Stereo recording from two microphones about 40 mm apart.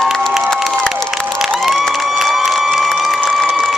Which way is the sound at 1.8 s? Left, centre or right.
Centre.